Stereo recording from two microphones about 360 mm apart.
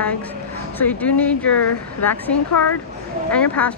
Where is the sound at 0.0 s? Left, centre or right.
Centre.